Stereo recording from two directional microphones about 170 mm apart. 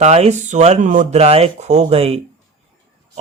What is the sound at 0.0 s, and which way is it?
Speech, 40° right (ahead or behind).